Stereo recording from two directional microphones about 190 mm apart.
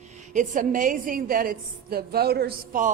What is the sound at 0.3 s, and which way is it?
A woman's voice, 45° right (ahead or behind).